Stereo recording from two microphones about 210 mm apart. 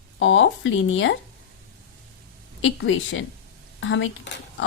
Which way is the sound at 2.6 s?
65° left (ahead or behind).